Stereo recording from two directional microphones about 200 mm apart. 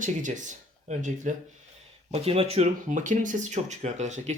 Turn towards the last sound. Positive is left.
turn(degrees=-35)  # may be behind; listen again after turning